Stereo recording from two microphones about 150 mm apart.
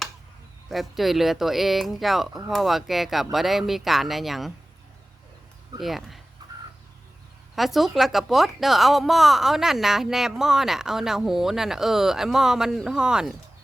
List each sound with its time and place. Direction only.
0.7 s a woman's voice: centre (ahead or behind)
5.8 s a woman's voice: centre (ahead or behind)
6.4 s a sound: 25° right (ahead or behind)
7.5 s a woman's voice: centre (ahead or behind)